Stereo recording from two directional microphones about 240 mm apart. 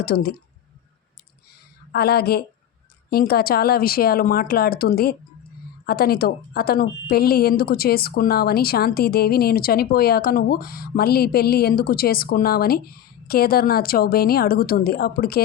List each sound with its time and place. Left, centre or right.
0.0 s a woman's voice: left
1.9 s a woman's voice: left